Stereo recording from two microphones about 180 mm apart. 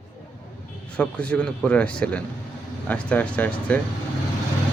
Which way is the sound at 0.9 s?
5° left (ahead or behind).